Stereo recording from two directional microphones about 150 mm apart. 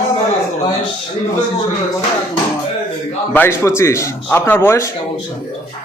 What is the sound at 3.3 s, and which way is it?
A man's voice, 15° left (ahead or behind).